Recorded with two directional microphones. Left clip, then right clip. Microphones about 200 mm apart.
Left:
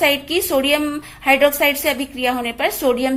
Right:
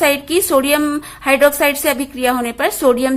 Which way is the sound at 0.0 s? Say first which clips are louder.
Right 2 dB; 25° right (ahead or behind).